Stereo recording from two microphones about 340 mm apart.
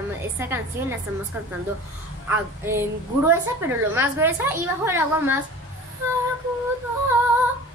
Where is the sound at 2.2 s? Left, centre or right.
Centre.